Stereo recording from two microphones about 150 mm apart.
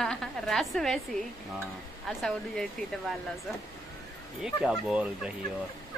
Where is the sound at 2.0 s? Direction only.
5° left (ahead or behind).